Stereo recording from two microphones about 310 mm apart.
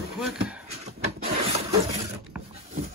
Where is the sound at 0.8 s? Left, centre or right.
Centre.